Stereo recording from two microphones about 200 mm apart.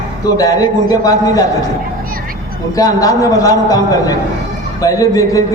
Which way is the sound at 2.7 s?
15° left (ahead or behind).